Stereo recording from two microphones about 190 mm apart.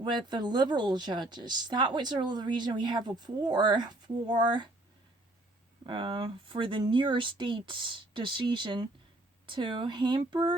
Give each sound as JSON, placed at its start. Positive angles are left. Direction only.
{"t": 0.0, "sound": "speech", "side_deg": -25}
{"t": 5.8, "sound": "speech", "side_deg": -25}